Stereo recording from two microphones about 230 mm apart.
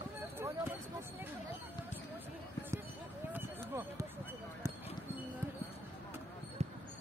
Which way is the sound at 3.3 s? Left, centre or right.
Centre.